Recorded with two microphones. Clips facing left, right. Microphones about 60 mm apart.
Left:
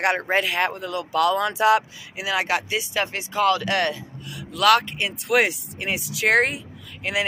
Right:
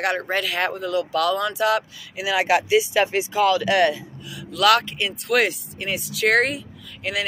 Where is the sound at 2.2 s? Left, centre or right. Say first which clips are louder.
Right 4 dB; centre.